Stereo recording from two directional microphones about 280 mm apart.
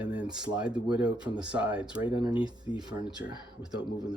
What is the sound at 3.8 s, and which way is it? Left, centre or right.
Speech, centre.